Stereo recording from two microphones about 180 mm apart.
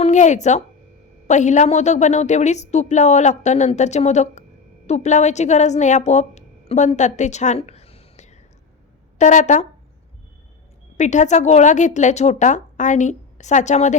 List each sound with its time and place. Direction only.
0.0 s a woman's voice: 40° left (ahead or behind)
10.9 s a woman's voice: 40° left (ahead or behind)